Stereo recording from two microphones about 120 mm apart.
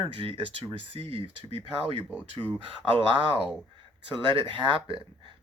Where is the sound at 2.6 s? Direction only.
50° right (ahead or behind).